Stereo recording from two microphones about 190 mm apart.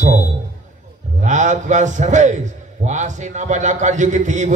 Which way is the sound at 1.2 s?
40° right (ahead or behind).